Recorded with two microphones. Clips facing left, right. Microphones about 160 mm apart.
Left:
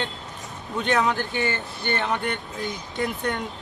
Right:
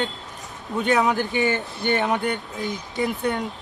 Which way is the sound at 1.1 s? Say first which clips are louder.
Right 4 dB; 15° right (ahead or behind).